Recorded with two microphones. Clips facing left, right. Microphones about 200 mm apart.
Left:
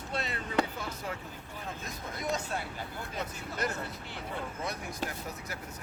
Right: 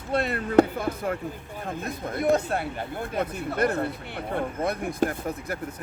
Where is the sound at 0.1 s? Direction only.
55° right (ahead or behind).